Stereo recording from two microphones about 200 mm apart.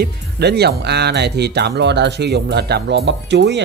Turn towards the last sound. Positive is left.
turn(degrees=-60)  # may be behind; listen again after turning